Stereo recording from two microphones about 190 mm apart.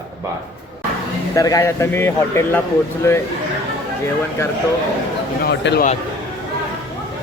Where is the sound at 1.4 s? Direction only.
15° left (ahead or behind).